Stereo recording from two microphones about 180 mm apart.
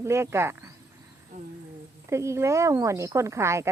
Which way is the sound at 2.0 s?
15° right (ahead or behind).